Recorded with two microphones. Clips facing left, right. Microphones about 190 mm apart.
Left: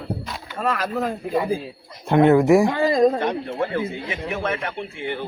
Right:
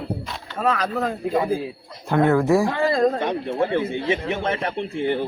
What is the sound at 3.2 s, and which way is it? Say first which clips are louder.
Speech: right 1 dB; 20° right (ahead or behind).